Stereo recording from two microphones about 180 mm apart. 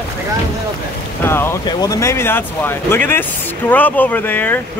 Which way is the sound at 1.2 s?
15° left (ahead or behind).